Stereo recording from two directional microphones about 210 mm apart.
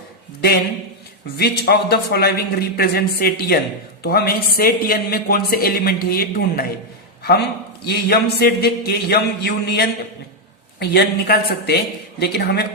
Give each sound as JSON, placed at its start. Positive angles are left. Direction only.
{"t": 1.4, "sound": "a man's voice", "side_deg": 50}
{"t": 7.9, "sound": "a man's voice", "side_deg": 50}